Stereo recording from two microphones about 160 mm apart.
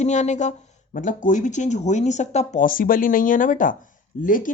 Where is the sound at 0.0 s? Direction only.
45° left (ahead or behind).